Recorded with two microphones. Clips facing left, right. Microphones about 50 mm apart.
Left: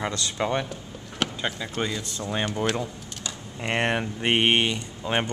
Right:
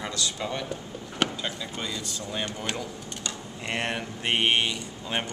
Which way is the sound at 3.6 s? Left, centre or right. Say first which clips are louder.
Left 5 dB; left.